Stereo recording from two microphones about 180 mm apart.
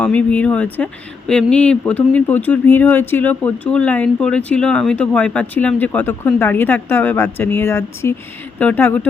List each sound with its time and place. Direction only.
0.0 s speech: 10° left (ahead or behind)